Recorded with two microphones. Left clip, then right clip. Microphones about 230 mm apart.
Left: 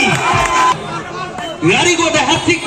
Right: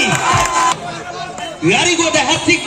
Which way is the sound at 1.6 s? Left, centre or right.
Right.